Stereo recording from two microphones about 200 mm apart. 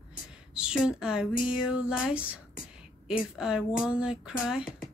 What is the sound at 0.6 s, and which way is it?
A woman's voice, 5° right (ahead or behind).